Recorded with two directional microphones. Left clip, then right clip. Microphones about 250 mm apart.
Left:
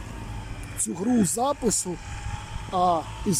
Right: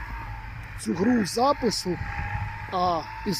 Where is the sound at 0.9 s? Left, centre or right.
Centre.